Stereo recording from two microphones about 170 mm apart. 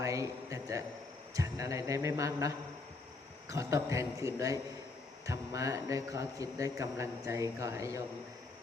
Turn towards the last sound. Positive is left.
turn(degrees=-15)  # may be behind; listen again after turning